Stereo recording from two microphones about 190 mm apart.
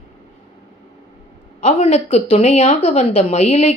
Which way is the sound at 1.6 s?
35° left (ahead or behind).